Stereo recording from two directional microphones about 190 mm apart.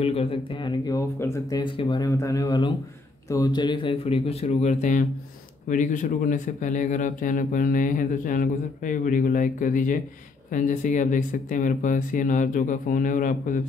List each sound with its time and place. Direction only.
0.0 s a man's voice: 30° left (ahead or behind)